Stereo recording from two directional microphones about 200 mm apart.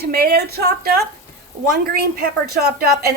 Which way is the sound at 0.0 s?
50° right (ahead or behind).